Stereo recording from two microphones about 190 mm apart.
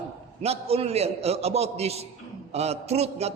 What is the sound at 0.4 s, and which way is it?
A man's voice, 30° right (ahead or behind).